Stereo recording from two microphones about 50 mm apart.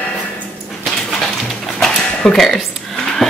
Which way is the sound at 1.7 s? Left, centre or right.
Centre.